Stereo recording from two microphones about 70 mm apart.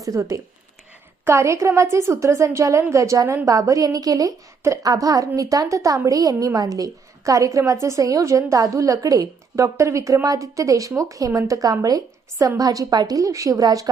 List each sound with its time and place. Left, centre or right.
0.0 s a woman's voice: right